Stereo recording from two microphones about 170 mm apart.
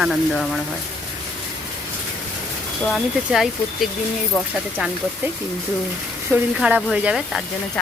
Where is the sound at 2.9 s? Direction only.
Centre (ahead or behind).